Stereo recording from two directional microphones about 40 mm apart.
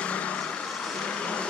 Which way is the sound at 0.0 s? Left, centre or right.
Left.